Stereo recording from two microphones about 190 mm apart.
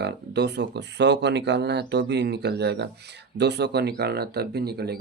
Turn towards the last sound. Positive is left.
turn(degrees=-55)  # may be behind; listen again after turning